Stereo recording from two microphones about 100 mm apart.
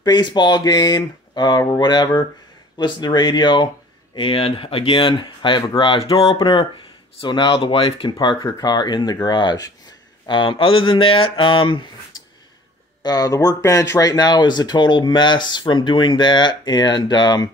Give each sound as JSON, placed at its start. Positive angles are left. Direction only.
{"t": 0.0, "sound": "speech", "side_deg": 45}
{"t": 4.1, "sound": "speech", "side_deg": 60}
{"t": 7.2, "sound": "speech", "side_deg": 50}
{"t": 8.5, "sound": "speech", "side_deg": 45}
{"t": 13.0, "sound": "speech", "side_deg": 40}